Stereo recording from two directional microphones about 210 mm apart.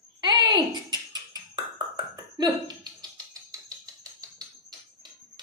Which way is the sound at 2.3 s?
20° right (ahead or behind).